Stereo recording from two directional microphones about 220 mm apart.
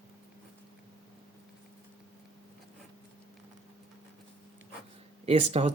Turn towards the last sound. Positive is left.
turn(degrees=-25)  # may be behind; listen again after turning